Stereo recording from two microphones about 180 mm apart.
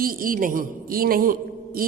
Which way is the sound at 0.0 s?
50° right (ahead or behind).